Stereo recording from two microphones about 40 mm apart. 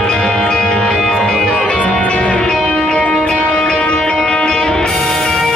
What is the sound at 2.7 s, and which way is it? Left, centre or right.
Music, centre.